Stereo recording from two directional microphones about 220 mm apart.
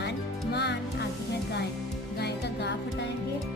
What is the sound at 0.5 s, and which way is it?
Music, 50° left (ahead or behind).